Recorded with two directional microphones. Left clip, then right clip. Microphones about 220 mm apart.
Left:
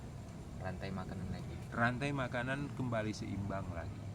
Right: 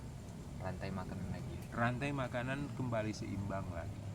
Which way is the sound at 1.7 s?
20° left (ahead or behind).